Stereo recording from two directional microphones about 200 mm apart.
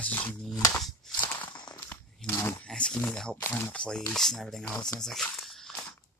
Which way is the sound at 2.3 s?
15° left (ahead or behind).